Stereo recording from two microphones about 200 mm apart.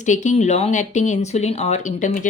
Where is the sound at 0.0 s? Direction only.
35° left (ahead or behind).